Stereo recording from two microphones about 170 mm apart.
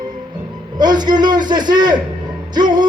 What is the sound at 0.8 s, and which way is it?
A man's voice, 25° right (ahead or behind).